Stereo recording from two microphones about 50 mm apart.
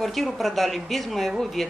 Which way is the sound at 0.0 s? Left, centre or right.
Centre.